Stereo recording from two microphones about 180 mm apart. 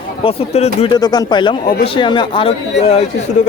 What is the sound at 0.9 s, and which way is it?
Speech, 20° left (ahead or behind).